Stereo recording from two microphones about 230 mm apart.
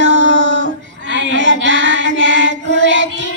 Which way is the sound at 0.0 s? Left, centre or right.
Right.